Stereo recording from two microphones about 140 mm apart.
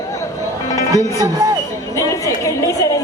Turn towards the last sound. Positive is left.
turn(degrees=25)  # may be behind; listen again after turning